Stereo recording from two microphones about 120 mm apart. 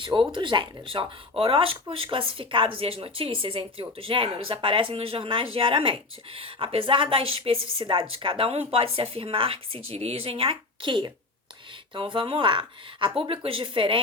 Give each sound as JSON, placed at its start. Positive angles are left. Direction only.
{"t": 0.0, "sound": "speech", "side_deg": -40}